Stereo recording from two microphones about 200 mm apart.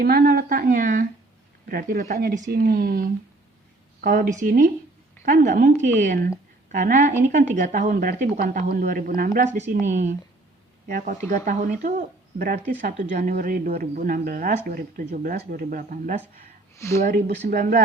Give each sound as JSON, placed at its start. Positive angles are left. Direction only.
{"t": 0.0, "sound": "a woman's voice", "side_deg": -50}
{"t": 16.7, "sound": "speech", "side_deg": 15}
{"t": 17.0, "sound": "a woman's voice", "side_deg": -50}